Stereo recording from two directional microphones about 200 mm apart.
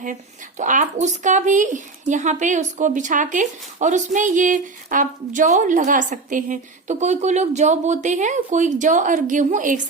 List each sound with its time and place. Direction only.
0.0 s speech: 40° right (ahead or behind)